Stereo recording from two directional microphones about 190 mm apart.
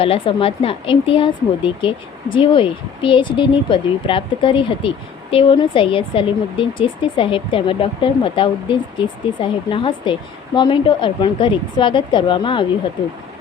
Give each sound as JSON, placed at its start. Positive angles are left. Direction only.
{"t": 0.0, "sound": "speech", "side_deg": 30}